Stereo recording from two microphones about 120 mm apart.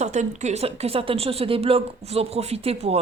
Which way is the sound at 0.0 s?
75° right (ahead or behind).